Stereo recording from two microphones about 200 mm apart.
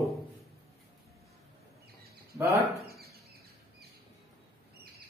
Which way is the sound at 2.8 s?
50° right (ahead or behind).